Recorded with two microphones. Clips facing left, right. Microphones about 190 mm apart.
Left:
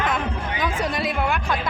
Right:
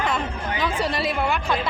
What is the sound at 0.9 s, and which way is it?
Speech, centre (ahead or behind).